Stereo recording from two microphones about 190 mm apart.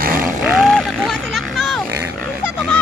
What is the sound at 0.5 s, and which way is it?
Vehicle, centre (ahead or behind).